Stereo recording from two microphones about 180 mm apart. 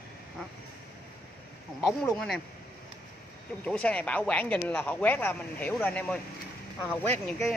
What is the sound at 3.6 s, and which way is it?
Speech, 5° left (ahead or behind).